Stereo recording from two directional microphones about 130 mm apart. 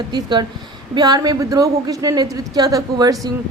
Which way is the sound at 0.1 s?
35° right (ahead or behind).